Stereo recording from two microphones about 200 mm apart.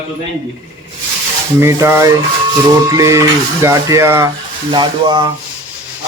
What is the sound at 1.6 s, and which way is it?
A man's voice, 15° right (ahead or behind).